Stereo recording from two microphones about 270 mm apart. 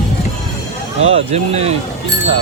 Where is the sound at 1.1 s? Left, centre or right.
Right.